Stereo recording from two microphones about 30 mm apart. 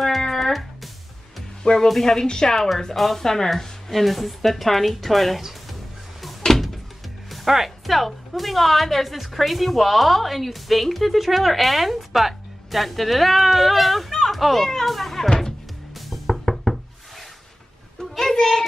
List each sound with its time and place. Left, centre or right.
0.3 s music: centre
1.6 s speech: left
1.9 s a woman's voice: centre
7.4 s a woman's voice: centre
14.1 s children playing: centre
14.9 s speech: centre
15.2 s music: centre
16.1 s music: centre
17.9 s a sound: left